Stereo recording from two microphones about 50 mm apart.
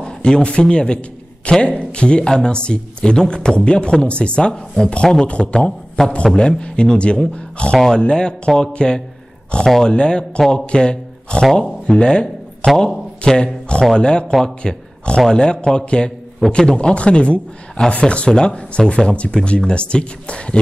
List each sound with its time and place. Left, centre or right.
0.0 s a man's voice: centre
7.7 s a man's voice: centre